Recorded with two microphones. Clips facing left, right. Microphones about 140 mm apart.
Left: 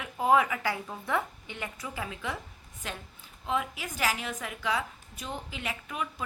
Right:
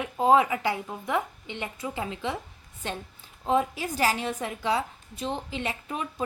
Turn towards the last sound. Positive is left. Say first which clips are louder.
# right 5 dB
turn(degrees=-30)  # may be behind; listen again after turning